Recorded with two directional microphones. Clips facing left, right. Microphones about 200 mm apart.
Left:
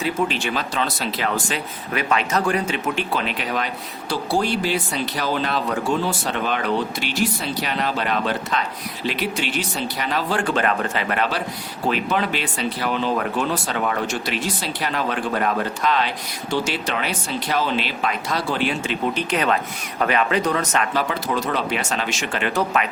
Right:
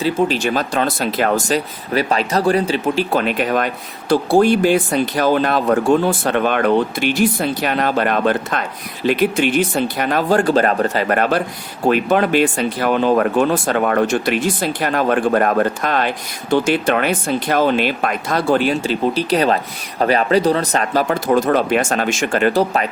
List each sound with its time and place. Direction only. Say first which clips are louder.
0.0 s speech: right 6 dB; 35° right (ahead or behind)